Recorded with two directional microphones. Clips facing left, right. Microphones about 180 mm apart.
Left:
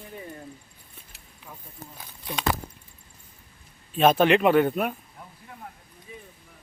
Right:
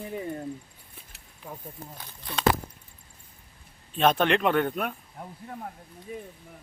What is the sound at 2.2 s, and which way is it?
Speech, 15° left (ahead or behind).